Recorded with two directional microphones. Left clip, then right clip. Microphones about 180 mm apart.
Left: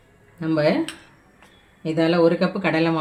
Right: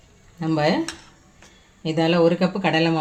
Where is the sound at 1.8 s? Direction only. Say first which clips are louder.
Even; 25° right (ahead or behind).